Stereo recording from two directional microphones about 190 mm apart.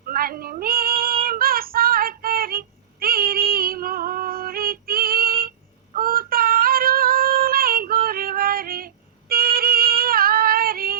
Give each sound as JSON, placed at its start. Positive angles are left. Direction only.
{"t": 0.1, "sound": "child singing", "side_deg": -50}
{"t": 6.0, "sound": "female singing", "side_deg": -50}